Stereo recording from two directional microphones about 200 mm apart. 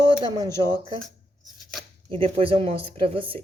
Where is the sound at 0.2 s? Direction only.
20° right (ahead or behind).